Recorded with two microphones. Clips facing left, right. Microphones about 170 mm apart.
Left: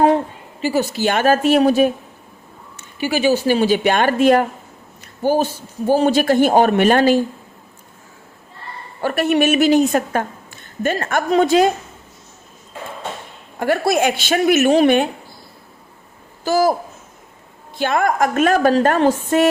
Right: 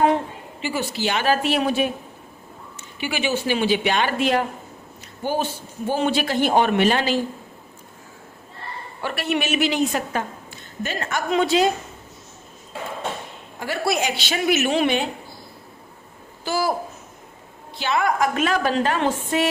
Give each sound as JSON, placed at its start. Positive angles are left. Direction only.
{"t": 0.6, "sound": "a woman's voice", "side_deg": 40}
{"t": 9.0, "sound": "a woman's voice", "side_deg": 45}
{"t": 13.6, "sound": "a woman's voice", "side_deg": 50}
{"t": 16.4, "sound": "a woman's voice", "side_deg": 45}
{"t": 17.7, "sound": "a woman's voice", "side_deg": 50}